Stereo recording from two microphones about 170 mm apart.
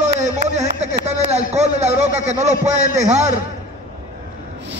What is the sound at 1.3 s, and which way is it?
A man's voice, 40° right (ahead or behind).